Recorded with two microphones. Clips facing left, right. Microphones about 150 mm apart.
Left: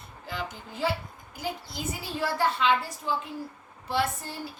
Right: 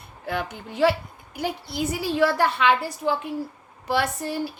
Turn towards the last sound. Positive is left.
turn(degrees=-70)  # may be behind; listen again after turning